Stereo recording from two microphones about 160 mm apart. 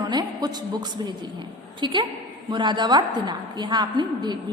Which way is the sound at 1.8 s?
30° right (ahead or behind).